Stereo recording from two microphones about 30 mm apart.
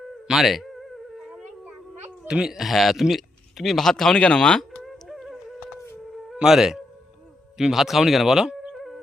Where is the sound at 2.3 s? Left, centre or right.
Right.